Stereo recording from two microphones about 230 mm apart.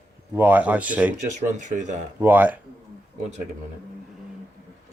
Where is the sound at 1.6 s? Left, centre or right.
Right.